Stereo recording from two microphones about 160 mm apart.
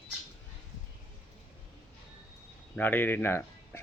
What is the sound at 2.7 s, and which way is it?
Speech, 10° left (ahead or behind).